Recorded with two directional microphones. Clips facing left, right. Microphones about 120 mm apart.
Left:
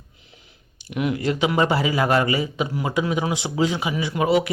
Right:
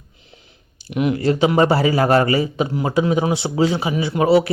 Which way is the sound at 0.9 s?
30° right (ahead or behind).